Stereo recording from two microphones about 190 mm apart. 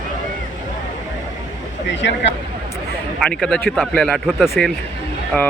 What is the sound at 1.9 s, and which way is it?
Speech, 70° left (ahead or behind).